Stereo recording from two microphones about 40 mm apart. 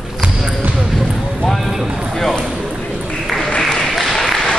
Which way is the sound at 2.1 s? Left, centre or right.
Centre.